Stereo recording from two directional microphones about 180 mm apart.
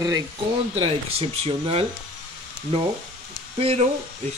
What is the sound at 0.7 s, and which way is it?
Speech, 35° right (ahead or behind).